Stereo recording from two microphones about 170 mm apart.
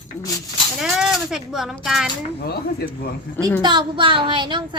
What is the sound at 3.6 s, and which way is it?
Speech, 25° right (ahead or behind).